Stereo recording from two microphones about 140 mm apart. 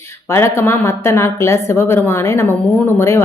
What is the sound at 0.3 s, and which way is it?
A woman's voice, 20° left (ahead or behind).